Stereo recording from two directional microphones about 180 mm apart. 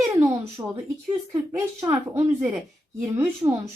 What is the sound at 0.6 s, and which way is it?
Speech, 15° right (ahead or behind).